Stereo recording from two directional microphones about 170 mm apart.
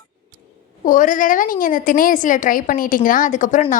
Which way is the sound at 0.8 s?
50° left (ahead or behind).